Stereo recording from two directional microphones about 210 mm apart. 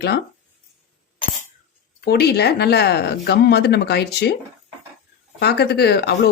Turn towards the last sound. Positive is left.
turn(degrees=50)  # may be behind; listen again after turning